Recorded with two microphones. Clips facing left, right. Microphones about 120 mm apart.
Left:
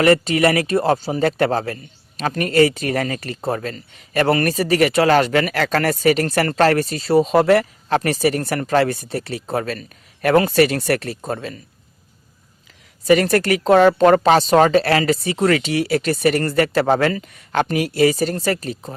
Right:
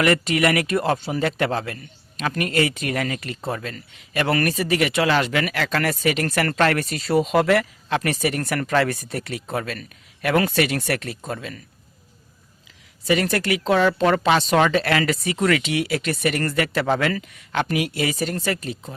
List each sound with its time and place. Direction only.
0.0 s a woman's voice: 30° left (ahead or behind)
13.1 s a woman's voice: 45° left (ahead or behind)